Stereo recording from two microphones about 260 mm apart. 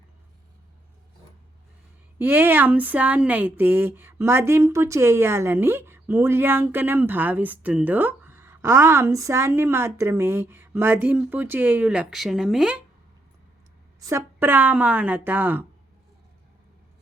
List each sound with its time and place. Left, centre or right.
2.1 s speech: centre
14.0 s speech: centre